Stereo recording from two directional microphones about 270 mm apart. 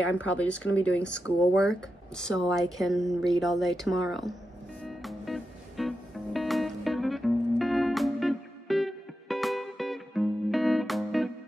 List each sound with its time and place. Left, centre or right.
0.3 s speech: centre
1.2 s speech: left
1.7 s speech: centre
4.8 s music: centre